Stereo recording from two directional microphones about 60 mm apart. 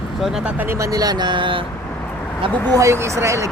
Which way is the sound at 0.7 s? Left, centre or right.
Right.